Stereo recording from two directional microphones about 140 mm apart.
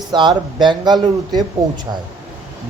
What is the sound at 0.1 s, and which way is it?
A man's voice, 35° right (ahead or behind).